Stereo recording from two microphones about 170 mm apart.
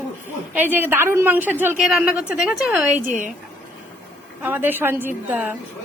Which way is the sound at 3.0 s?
50° right (ahead or behind).